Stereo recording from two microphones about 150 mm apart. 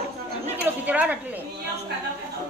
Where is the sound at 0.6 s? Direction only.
10° right (ahead or behind).